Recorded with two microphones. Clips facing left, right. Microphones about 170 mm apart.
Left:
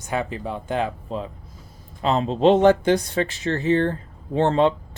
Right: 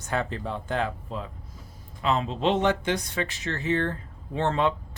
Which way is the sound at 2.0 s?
35° left (ahead or behind).